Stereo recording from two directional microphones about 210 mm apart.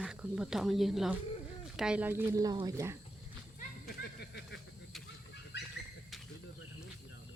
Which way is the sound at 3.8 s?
50° left (ahead or behind).